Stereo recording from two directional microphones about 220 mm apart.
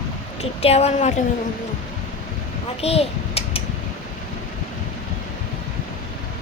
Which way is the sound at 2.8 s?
25° left (ahead or behind).